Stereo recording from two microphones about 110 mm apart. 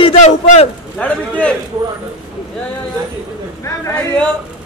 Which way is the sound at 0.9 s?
10° left (ahead or behind).